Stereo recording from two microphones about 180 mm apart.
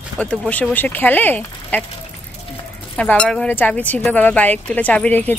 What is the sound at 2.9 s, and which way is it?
Speech, 5° left (ahead or behind).